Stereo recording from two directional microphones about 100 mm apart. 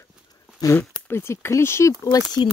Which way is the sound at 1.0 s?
25° left (ahead or behind).